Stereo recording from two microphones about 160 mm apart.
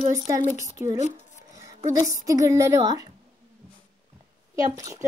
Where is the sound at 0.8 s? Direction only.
10° right (ahead or behind).